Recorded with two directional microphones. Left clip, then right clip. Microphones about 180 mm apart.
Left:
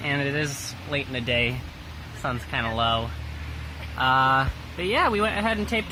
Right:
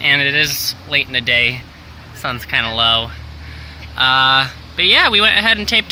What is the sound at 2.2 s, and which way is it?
Speech, 15° right (ahead or behind).